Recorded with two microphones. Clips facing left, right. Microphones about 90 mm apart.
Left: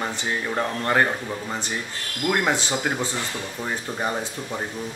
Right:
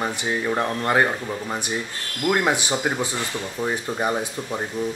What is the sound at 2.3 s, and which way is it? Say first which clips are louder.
Speech: right 2 dB; 15° right (ahead or behind).